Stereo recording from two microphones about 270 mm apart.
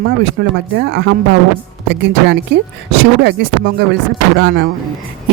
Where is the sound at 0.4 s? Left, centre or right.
Right.